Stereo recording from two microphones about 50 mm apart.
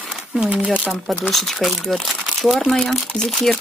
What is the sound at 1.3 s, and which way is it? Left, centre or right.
Speech, centre.